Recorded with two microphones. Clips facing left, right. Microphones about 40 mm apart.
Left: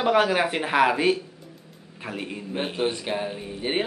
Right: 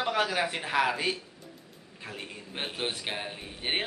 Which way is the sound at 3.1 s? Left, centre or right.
Centre.